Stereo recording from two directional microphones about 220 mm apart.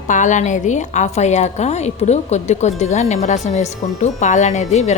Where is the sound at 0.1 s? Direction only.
35° left (ahead or behind).